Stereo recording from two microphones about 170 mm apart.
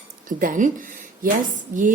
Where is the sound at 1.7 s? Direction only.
50° right (ahead or behind).